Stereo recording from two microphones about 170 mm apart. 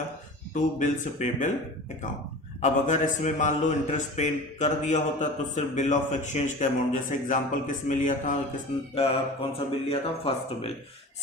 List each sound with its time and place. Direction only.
0.5 s speech: 45° left (ahead or behind)
2.6 s speech: 45° left (ahead or behind)
9.0 s speech: 35° left (ahead or behind)